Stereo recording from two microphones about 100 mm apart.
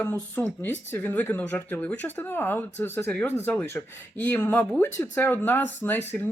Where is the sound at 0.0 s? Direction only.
20° left (ahead or behind).